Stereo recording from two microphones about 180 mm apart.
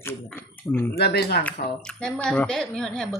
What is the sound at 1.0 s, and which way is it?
Speech, 60° left (ahead or behind).